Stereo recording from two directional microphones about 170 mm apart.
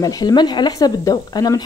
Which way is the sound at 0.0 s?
20° left (ahead or behind).